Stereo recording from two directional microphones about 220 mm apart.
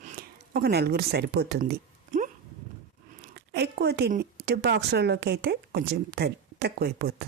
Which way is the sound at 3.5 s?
50° right (ahead or behind).